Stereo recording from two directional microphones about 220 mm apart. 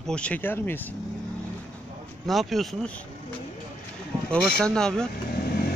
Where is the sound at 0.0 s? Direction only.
5° left (ahead or behind).